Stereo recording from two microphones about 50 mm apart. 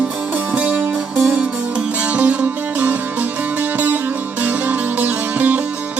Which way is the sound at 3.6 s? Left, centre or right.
Right.